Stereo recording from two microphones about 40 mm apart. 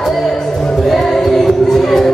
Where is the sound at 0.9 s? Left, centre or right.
Centre.